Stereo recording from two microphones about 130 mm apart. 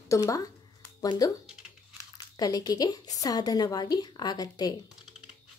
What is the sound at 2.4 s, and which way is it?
Speech, 30° left (ahead or behind).